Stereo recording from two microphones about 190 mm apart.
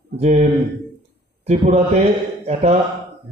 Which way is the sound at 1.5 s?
35° right (ahead or behind).